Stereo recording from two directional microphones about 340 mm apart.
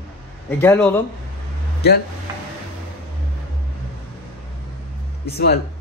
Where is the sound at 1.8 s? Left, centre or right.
Left.